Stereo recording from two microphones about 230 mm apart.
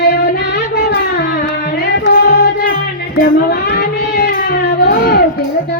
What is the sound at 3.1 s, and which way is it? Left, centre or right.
Music, left.